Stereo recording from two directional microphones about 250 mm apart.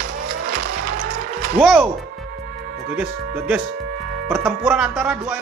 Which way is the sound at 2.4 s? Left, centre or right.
Right.